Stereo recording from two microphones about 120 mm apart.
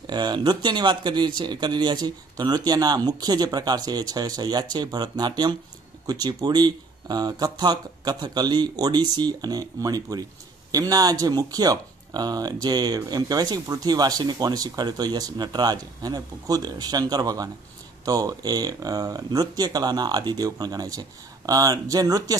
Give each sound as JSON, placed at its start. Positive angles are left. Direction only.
{"t": 0.0, "sound": "speech", "side_deg": -40}